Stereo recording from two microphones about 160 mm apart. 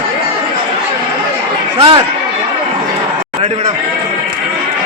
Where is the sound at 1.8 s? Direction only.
30° right (ahead or behind).